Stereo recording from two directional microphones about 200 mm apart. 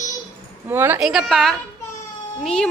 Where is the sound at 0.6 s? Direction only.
10° right (ahead or behind).